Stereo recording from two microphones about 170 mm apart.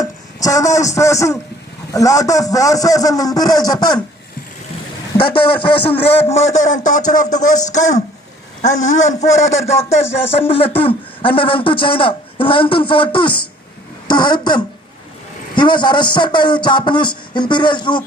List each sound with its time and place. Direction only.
0.4 s a man's voice: 20° left (ahead or behind)
5.2 s a man's voice: 30° left (ahead or behind)
14.1 s a man's voice: 25° left (ahead or behind)